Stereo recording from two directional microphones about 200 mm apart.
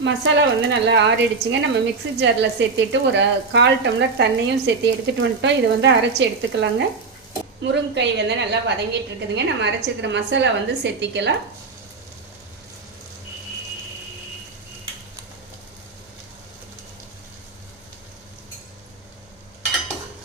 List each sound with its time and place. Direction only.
0.0 s speech: 60° right (ahead or behind)